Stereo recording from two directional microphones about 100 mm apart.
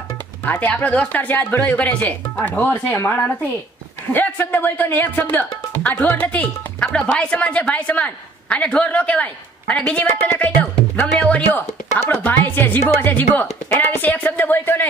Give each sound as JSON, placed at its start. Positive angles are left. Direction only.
{"t": 0.5, "sound": "a woman's voice", "side_deg": 20}